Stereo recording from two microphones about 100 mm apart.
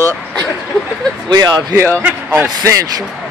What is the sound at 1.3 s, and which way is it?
Speech, 40° right (ahead or behind).